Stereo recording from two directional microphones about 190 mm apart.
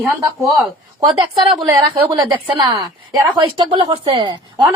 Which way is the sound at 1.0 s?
25° right (ahead or behind).